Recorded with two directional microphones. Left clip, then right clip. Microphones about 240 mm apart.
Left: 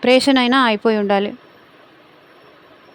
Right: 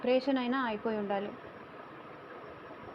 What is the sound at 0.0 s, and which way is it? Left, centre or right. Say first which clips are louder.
Speech: left 16 dB; left.